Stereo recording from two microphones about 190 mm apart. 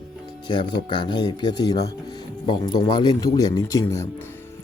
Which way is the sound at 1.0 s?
25° left (ahead or behind).